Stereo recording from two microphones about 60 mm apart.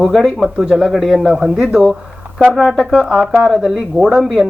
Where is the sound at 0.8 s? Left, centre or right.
Centre.